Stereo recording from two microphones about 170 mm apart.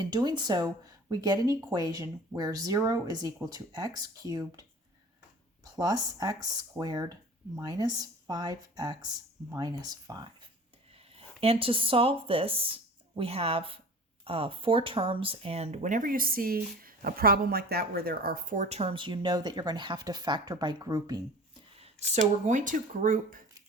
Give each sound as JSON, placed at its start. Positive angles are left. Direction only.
{"t": 0.0, "sound": "speech", "side_deg": -25}
{"t": 5.6, "sound": "speech", "side_deg": -20}
{"t": 10.9, "sound": "speech", "side_deg": -35}
{"t": 21.8, "sound": "speech", "side_deg": -40}